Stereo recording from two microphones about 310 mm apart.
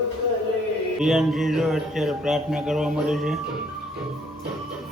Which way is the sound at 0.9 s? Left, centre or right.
Centre.